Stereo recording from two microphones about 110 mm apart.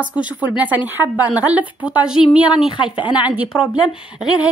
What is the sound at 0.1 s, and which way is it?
Speech, 10° right (ahead or behind).